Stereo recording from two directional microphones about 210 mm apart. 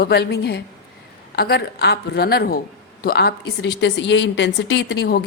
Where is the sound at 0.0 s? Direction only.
50° left (ahead or behind).